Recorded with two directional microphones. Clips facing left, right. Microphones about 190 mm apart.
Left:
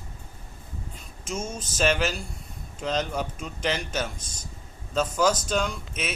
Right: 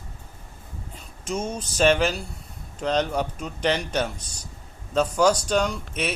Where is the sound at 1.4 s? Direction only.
35° right (ahead or behind).